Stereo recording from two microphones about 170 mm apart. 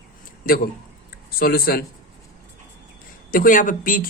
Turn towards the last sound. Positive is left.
turn(degrees=55)  # may be behind; listen again after turning